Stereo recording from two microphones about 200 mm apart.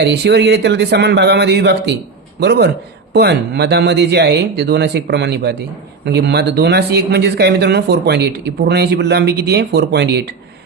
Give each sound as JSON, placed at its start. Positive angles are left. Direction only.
{"t": 0.0, "sound": "speech", "side_deg": -55}